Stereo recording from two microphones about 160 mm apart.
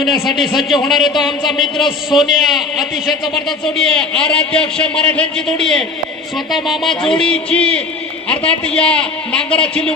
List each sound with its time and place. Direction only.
0.0 s a man's voice: centre (ahead or behind)